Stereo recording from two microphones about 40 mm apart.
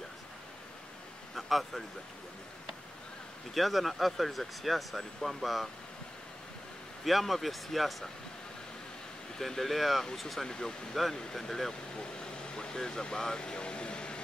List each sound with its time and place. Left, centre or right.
1.3 s a sound: centre
3.5 s speech: centre
7.1 s speech: centre
9.4 s speech: centre
12.0 s vehicle: left